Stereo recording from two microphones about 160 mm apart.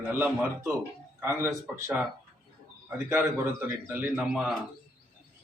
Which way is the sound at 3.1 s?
15° right (ahead or behind).